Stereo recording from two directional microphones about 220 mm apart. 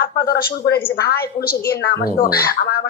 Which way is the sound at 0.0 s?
45° left (ahead or behind).